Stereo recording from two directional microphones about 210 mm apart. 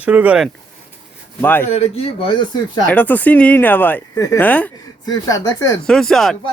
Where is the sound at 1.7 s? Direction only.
30° left (ahead or behind).